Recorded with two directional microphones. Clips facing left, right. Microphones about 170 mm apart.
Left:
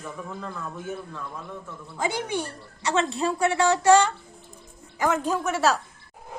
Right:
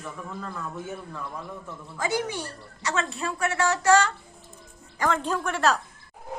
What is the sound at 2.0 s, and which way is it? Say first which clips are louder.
A woman's voice: left 1 dB; 25° left (ahead or behind).